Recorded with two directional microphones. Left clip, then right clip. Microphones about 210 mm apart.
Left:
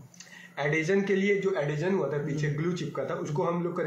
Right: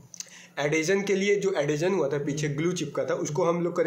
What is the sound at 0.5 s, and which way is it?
A man's voice, 40° right (ahead or behind).